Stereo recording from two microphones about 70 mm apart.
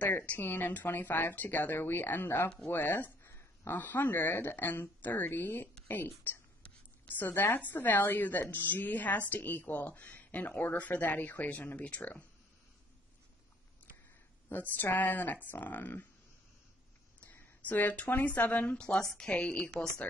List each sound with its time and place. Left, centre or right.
0.3 s speech: left
14.5 s speech: left
17.2 s speech: left